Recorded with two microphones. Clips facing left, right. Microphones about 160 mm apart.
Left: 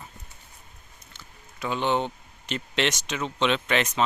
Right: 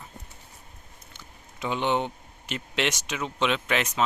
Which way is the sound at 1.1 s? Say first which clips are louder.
Even; 20° right (ahead or behind).